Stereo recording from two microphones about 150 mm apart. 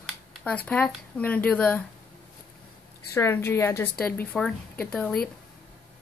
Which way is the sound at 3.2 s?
15° left (ahead or behind).